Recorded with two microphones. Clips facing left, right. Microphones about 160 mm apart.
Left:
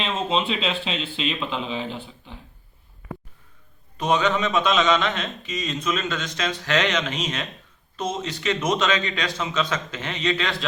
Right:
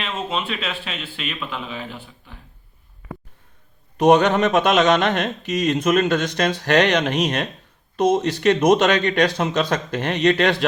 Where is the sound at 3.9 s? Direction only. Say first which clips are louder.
Right 7 dB; 70° right (ahead or behind).